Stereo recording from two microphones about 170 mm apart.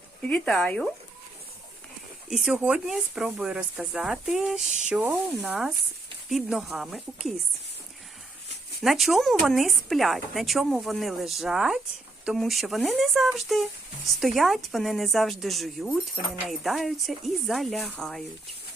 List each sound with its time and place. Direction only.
0.2 s speech: 5° left (ahead or behind)
2.3 s speech: 5° right (ahead or behind)
8.8 s speech: centre (ahead or behind)